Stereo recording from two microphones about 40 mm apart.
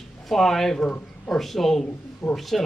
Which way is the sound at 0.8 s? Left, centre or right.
Left.